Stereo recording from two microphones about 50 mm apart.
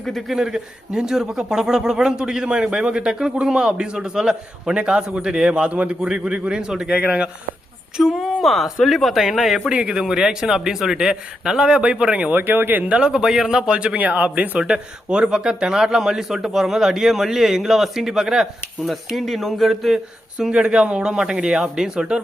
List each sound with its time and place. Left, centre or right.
0.0 s speech: centre
0.3 s a man's voice: centre
7.9 s speech: centre
9.6 s a man's voice: centre
12.3 s speech: right
12.9 s a man's voice: centre
20.4 s a man's voice: centre